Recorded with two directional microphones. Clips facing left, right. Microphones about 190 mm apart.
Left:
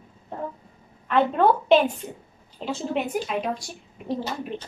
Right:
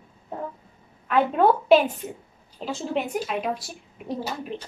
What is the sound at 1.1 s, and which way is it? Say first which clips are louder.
A woman's voice: even; 5° right (ahead or behind).